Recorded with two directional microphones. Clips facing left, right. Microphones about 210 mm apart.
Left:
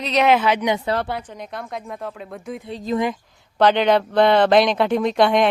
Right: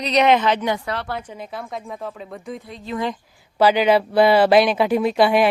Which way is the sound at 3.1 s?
5° right (ahead or behind).